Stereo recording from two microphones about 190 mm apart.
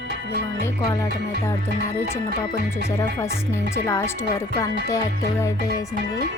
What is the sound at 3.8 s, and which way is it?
Speech, 15° left (ahead or behind).